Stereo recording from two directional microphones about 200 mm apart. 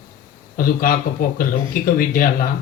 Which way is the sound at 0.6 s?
45° left (ahead or behind).